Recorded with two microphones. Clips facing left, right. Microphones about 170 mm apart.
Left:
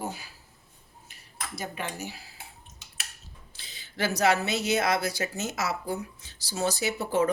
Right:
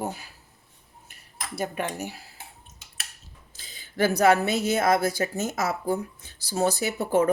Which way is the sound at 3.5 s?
45° right (ahead or behind).